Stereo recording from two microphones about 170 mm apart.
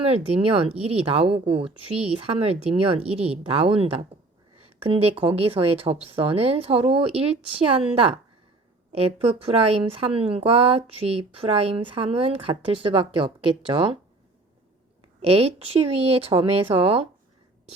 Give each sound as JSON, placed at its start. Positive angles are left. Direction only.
{"t": 0.1, "sound": "speech", "side_deg": -35}
{"t": 8.9, "sound": "speech", "side_deg": -35}
{"t": 15.2, "sound": "speech", "side_deg": -35}